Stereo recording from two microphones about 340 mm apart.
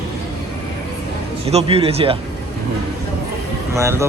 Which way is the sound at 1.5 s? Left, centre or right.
Centre.